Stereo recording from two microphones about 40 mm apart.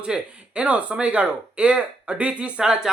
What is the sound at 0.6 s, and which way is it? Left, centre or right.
Speech, right.